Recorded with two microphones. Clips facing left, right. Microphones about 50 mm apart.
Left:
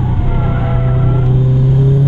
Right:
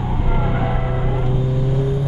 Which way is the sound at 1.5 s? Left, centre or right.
Left.